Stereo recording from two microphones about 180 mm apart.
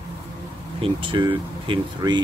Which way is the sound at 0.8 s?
30° right (ahead or behind).